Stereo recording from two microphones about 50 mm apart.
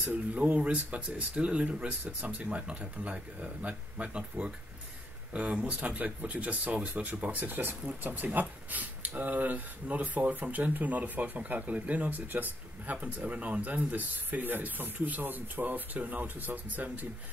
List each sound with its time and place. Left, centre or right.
0.0 s speech: right